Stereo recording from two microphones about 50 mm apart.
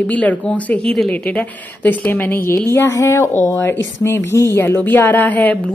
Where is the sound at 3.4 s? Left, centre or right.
Left.